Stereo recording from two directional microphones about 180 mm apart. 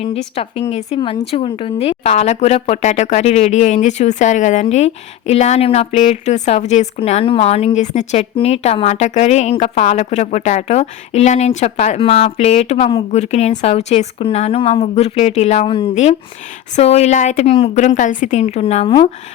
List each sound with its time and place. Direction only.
0.3 s speech: 30° left (ahead or behind)